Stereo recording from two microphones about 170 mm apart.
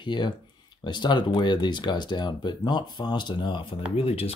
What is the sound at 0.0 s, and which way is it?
Speech, 25° left (ahead or behind).